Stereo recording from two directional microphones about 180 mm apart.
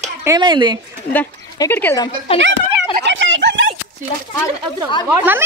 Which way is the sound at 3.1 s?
90° right.